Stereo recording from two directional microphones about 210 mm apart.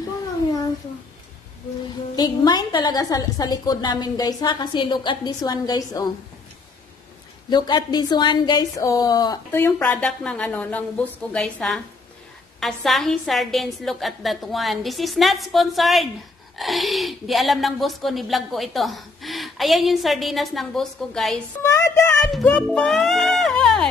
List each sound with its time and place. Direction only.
2.1 s a woman's voice: 20° left (ahead or behind)
7.4 s a woman's voice: 20° left (ahead or behind); by 21.4 s centre (ahead or behind)
21.6 s a sound: 10° left (ahead or behind)
22.4 s speech: 5° left (ahead or behind)